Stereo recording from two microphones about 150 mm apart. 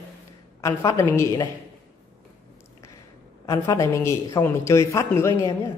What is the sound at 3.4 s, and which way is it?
Speech, 20° left (ahead or behind).